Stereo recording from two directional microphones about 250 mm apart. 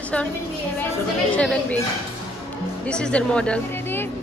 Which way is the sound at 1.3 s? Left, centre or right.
Centre.